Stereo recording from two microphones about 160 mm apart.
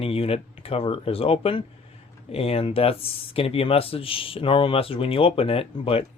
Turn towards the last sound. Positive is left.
turn(degrees=35)  # may be behind; listen again after turning